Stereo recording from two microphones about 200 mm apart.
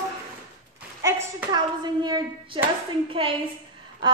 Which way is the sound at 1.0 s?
15° right (ahead or behind).